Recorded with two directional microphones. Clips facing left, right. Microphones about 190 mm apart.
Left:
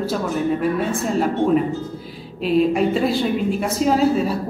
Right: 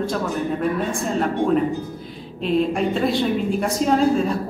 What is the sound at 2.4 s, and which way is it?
A woman's voice, 5° left (ahead or behind).